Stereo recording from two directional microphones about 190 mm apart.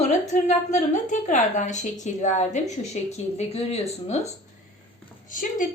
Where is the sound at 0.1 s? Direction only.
40° left (ahead or behind).